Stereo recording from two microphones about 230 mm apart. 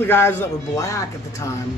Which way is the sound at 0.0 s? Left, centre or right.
Centre.